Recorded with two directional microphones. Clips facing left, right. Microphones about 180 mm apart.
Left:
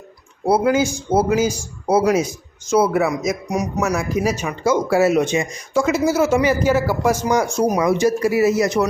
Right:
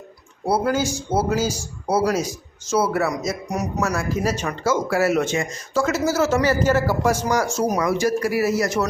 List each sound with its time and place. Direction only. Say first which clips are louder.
0.4 s speech: left 4 dB; 20° left (ahead or behind)